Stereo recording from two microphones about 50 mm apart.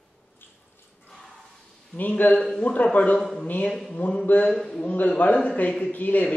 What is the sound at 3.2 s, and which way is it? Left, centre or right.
Speech, centre.